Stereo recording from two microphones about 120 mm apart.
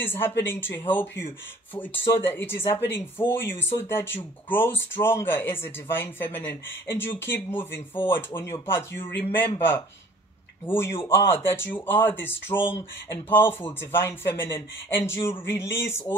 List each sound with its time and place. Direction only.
0.0 s speech: 20° left (ahead or behind)
10.7 s speech: 20° left (ahead or behind)